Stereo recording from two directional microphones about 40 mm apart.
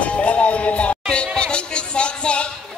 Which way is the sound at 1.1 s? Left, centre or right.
Left.